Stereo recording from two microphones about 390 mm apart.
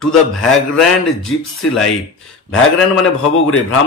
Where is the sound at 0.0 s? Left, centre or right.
Centre.